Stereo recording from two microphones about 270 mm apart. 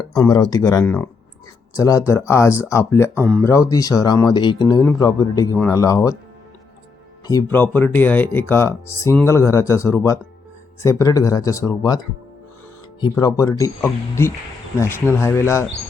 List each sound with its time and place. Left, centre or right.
0.1 s speech: centre
7.3 s speech: centre
13.0 s speech: centre